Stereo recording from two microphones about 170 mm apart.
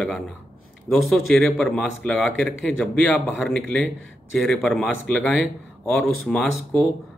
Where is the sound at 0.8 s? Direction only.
Centre (ahead or behind).